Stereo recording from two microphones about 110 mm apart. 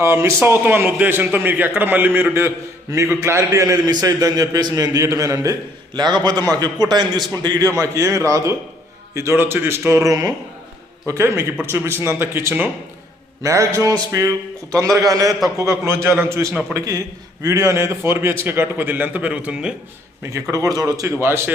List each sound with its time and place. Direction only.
0.0 s a man's voice: 25° right (ahead or behind)
14.7 s a man's voice: 30° right (ahead or behind); by 19.7 s 10° right (ahead or behind)
20.3 s a man's voice: 30° right (ahead or behind)